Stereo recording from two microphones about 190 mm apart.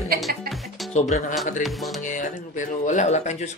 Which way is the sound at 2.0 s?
40° left (ahead or behind).